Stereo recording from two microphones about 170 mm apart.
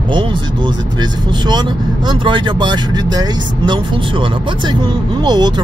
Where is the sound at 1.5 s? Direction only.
25° right (ahead or behind).